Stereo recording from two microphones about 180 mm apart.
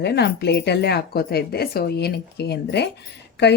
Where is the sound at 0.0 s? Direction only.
65° left (ahead or behind).